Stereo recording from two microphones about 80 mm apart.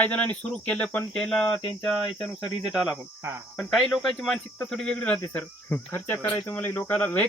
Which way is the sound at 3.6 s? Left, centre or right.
Centre.